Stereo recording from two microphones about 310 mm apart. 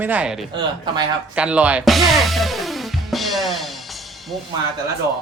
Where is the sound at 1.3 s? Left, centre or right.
Centre.